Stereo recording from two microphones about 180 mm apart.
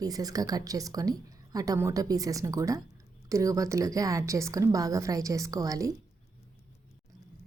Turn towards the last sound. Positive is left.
turn(degrees=-20)  # may be behind; listen again after turning